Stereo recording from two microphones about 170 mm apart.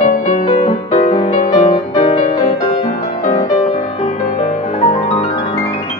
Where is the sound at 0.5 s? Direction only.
35° left (ahead or behind).